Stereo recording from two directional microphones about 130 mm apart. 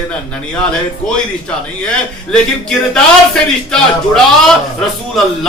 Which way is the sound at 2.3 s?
5° left (ahead or behind).